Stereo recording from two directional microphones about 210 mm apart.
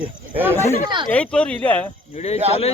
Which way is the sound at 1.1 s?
5° left (ahead or behind).